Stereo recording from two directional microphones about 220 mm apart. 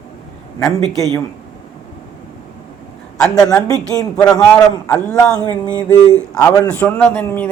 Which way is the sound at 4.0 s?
5° left (ahead or behind).